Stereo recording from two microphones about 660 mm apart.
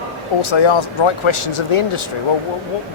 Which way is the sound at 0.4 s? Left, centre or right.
Left.